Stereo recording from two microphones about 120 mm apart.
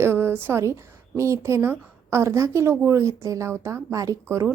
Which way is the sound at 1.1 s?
25° right (ahead or behind).